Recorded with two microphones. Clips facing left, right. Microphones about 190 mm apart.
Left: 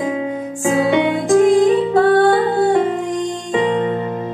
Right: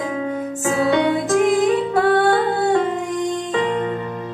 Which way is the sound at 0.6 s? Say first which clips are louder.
Left 2 dB; 20° left (ahead or behind).